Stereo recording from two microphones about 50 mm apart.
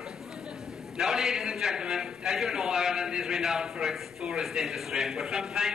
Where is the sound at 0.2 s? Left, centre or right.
Centre.